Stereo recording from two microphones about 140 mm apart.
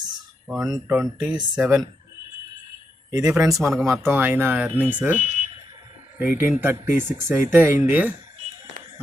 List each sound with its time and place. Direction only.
0.4 s speech: 5° right (ahead or behind)
3.1 s speech: 20° right (ahead or behind)
3.6 s speech: centre (ahead or behind)
4.0 s speech: 15° right (ahead or behind)